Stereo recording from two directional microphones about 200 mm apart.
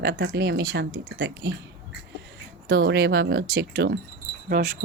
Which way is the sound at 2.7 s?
55° right (ahead or behind).